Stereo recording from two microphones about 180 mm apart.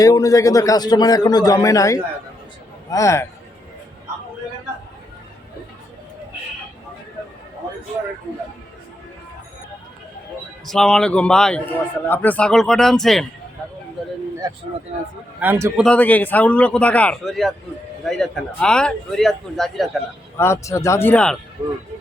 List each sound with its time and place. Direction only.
0.0 s a man's voice: 20° left (ahead or behind)
10.7 s speech: 5° left (ahead or behind)
15.4 s a man's voice: 15° right (ahead or behind)
15.8 s a man's voice: 5° left (ahead or behind)
20.3 s a man's voice: 15° left (ahead or behind)